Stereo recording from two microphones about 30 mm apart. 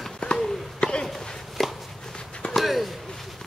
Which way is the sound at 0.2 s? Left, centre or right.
Left.